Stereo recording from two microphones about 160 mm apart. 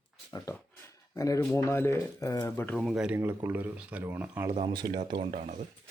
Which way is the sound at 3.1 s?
15° right (ahead or behind).